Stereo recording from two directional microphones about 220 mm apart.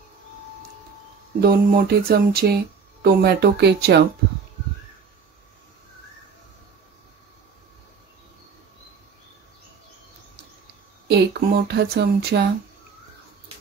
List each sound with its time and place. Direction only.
1.4 s speech: 45° right (ahead or behind)
11.1 s speech: 50° right (ahead or behind)